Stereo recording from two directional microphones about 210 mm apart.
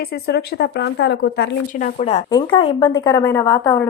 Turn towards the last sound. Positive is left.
turn(degrees=15)  # may be behind; listen again after turning